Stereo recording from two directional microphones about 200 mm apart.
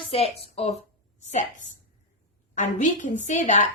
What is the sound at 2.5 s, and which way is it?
A woman's voice, 40° left (ahead or behind).